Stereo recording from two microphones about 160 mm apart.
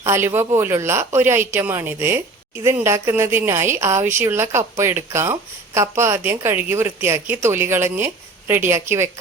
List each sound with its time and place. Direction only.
0.0 s a woman's voice: 15° right (ahead or behind)